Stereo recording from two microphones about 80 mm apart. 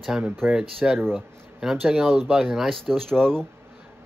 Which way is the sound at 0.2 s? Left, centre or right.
Centre.